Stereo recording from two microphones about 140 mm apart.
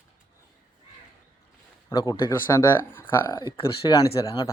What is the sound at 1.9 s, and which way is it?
Speech, 30° left (ahead or behind).